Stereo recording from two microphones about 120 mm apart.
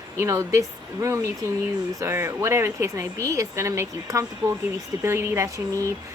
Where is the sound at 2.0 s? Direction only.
20° right (ahead or behind).